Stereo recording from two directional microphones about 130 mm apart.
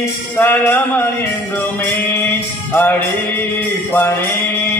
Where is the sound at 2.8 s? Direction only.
15° left (ahead or behind).